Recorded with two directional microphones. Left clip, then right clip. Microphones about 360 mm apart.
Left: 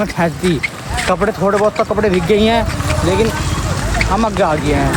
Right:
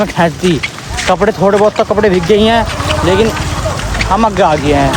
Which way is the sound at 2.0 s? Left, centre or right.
Centre.